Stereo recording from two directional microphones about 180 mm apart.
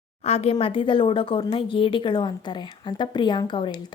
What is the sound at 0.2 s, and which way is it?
A woman's voice, 35° left (ahead or behind).